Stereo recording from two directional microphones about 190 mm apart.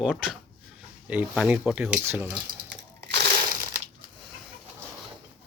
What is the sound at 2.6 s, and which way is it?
Crushing, 60° right (ahead or behind).